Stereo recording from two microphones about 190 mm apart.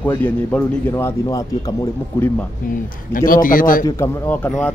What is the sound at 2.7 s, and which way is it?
A man's voice, 45° left (ahead or behind).